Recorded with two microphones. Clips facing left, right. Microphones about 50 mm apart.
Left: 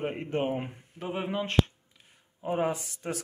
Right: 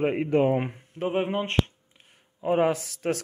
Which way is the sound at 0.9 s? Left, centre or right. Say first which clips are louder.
Right 6 dB; right.